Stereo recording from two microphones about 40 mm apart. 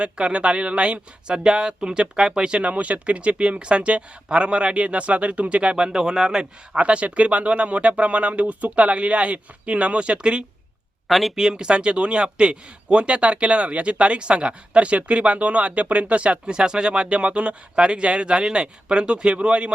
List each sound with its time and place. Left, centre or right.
0.0 s speech: right
11.1 s speech: centre
11.3 s speech: centre